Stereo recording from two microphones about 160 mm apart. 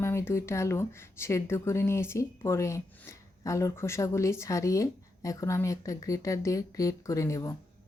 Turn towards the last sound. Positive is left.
turn(degrees=20)  # may be behind; listen again after turning